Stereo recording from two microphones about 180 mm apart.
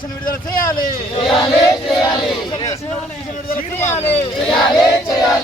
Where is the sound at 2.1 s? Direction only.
20° left (ahead or behind).